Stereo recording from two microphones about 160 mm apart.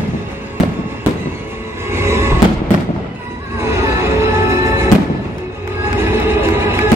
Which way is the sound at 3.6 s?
15° right (ahead or behind).